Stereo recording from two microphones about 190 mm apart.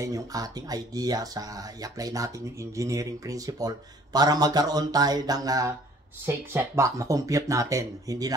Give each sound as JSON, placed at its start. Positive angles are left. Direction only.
{"t": 0.0, "sound": "speech", "side_deg": -20}